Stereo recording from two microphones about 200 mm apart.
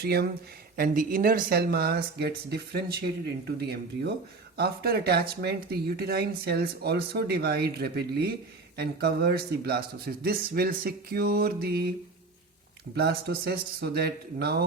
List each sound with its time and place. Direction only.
0.0 s speech: 50° right (ahead or behind)
13.0 s speech: 55° right (ahead or behind)